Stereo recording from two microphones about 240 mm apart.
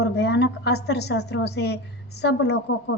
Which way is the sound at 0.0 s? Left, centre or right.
Left.